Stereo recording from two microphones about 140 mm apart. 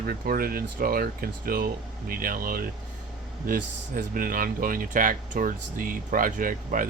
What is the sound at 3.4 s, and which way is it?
Speech, 80° right.